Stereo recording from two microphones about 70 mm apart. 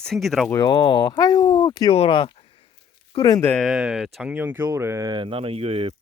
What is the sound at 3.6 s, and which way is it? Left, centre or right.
Speech, centre.